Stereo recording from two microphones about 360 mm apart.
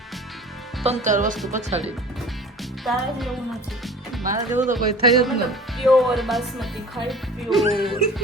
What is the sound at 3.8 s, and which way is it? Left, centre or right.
Music, centre.